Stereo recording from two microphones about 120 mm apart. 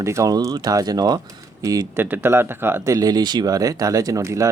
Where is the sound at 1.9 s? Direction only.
15° right (ahead or behind).